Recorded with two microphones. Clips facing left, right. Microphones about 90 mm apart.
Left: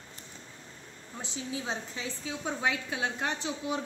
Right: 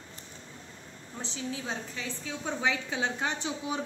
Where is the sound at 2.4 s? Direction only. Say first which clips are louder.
Right 1 dB; 5° left (ahead or behind).